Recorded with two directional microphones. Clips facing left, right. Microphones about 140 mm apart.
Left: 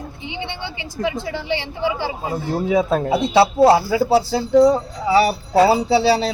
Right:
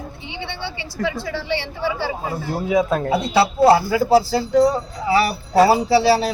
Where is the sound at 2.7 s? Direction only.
30° left (ahead or behind).